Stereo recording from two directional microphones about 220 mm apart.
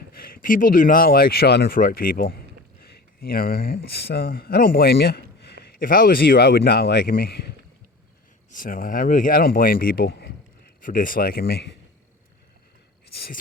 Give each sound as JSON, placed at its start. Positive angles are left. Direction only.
{"t": 0.2, "sound": "speech", "side_deg": 40}
{"t": 8.5, "sound": "speech", "side_deg": 40}